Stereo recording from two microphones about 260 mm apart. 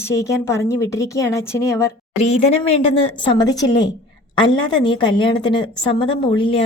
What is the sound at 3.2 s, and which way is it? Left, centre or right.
A woman's voice, centre.